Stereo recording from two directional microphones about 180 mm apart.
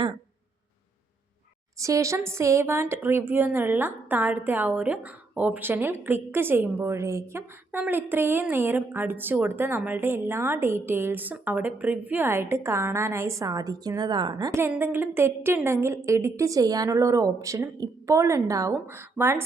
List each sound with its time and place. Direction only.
1.8 s a woman's voice: 15° right (ahead or behind)